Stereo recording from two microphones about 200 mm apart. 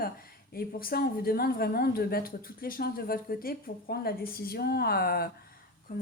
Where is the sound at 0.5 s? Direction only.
50° left (ahead or behind).